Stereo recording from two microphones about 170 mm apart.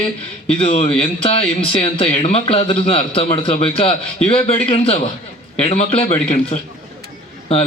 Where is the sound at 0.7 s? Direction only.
35° left (ahead or behind).